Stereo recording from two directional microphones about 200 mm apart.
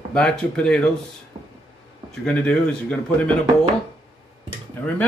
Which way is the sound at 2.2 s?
5° left (ahead or behind).